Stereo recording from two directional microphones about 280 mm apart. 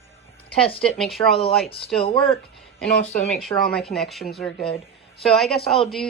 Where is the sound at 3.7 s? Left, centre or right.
Centre.